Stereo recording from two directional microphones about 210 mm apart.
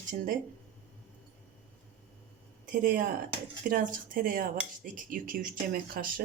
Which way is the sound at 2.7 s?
40° right (ahead or behind).